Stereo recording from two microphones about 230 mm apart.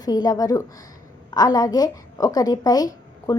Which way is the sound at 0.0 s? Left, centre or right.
Centre.